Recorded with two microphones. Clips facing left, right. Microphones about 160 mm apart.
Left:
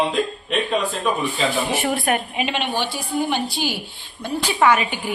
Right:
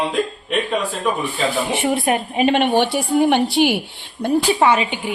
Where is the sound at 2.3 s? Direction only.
50° right (ahead or behind); by 3.8 s 65° right (ahead or behind).